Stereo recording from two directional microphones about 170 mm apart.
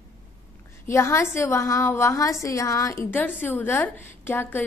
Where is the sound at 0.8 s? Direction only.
15° left (ahead or behind).